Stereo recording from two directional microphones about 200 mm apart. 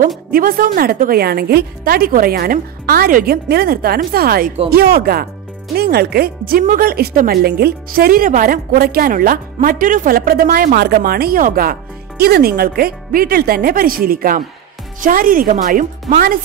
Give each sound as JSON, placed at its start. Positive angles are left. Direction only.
{"t": 0.3, "sound": "speech", "side_deg": -45}